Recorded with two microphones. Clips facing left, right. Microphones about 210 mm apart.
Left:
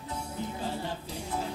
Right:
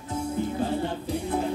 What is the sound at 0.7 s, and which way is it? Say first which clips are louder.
Music: right 8 dB; 55° right (ahead or behind).